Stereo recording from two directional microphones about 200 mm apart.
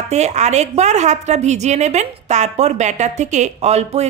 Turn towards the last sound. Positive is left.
turn(degrees=-30)  # may be behind; listen again after turning